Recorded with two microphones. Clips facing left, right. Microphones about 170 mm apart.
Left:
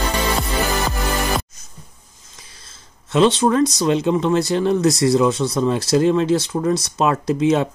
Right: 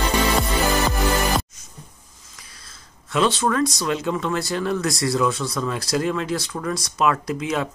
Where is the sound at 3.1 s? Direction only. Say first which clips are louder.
Left 5 dB; 20° left (ahead or behind).